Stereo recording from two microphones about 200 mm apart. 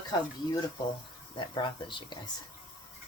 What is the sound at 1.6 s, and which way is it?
Speech, 25° left (ahead or behind).